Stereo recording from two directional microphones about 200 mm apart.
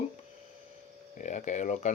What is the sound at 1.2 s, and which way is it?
Speech, 35° left (ahead or behind).